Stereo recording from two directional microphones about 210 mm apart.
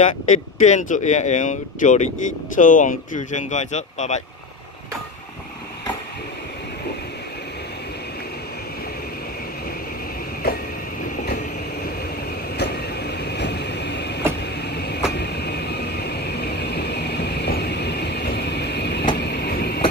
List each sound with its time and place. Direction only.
0.0 s speech: 35° left (ahead or behind)
12.5 s vehicle: 50° left (ahead or behind)